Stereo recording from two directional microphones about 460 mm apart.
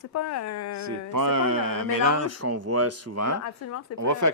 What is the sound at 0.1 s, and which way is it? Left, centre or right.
Speech, left.